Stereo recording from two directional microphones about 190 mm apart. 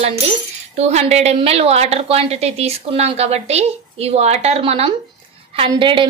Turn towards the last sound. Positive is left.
turn(degrees=-25)  # may be behind; listen again after turning